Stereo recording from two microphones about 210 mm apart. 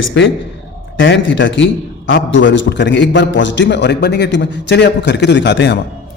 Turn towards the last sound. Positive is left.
turn(degrees=55)  # may be behind; listen again after turning